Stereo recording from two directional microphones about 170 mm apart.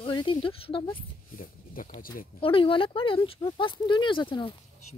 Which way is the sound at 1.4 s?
55° left (ahead or behind).